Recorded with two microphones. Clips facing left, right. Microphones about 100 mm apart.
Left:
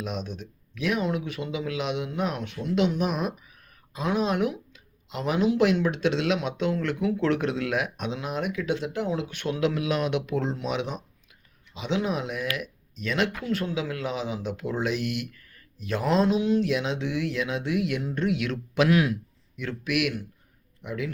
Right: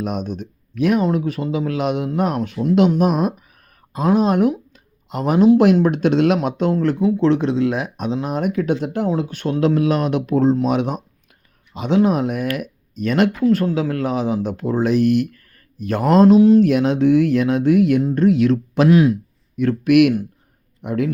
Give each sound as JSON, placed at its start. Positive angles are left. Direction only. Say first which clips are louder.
{"t": 0.0, "sound": "speech", "louder": "right 9 dB", "side_deg": -50}
{"t": 19.5, "sound": "speech", "louder": "right 14 dB", "side_deg": -50}